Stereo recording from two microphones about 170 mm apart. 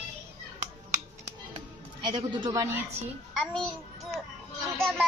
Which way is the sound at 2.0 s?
25° right (ahead or behind).